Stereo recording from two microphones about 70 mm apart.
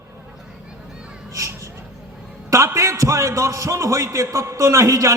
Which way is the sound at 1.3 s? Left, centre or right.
Right.